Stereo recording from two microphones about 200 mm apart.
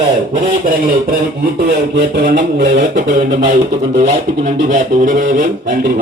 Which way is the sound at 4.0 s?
35° right (ahead or behind).